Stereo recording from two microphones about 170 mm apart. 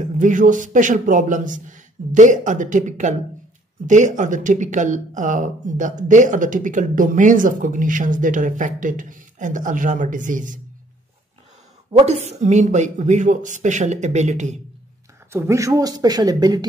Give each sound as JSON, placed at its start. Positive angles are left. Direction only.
{"t": 0.0, "sound": "speech", "side_deg": -50}
{"t": 11.9, "sound": "speech", "side_deg": -40}
{"t": 15.3, "sound": "speech", "side_deg": -15}